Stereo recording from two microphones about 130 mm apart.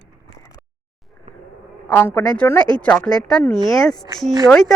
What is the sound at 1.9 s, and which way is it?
A woman's voice, 10° left (ahead or behind).